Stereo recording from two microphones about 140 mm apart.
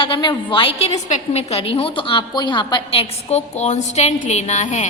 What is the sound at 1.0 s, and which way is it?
A woman's voice, 55° left (ahead or behind).